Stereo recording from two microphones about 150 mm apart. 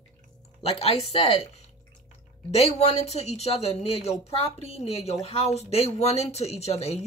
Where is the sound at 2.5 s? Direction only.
45° left (ahead or behind).